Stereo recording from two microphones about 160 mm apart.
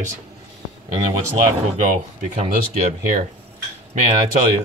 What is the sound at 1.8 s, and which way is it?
Speech, 50° right (ahead or behind).